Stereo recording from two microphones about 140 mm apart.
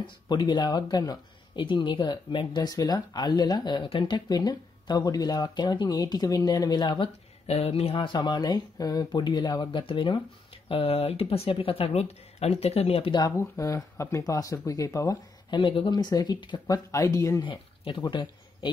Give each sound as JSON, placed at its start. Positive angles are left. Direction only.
{"t": 0.0, "sound": "speech", "side_deg": 30}
{"t": 7.4, "sound": "speech", "side_deg": 45}
{"t": 13.1, "sound": "speech", "side_deg": 25}
{"t": 17.4, "sound": "speech", "side_deg": 35}